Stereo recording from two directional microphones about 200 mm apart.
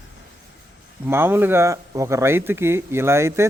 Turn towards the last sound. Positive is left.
turn(degrees=-15)  # may be behind; listen again after turning